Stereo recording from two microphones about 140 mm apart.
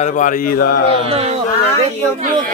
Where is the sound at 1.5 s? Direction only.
20° left (ahead or behind).